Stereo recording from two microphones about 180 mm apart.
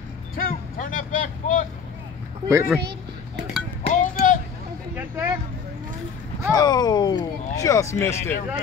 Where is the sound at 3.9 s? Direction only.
45° left (ahead or behind).